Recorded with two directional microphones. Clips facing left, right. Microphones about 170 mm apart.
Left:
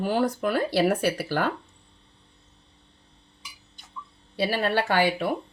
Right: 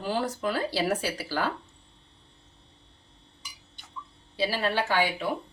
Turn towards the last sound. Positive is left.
turn(degrees=60)  # may be behind; listen again after turning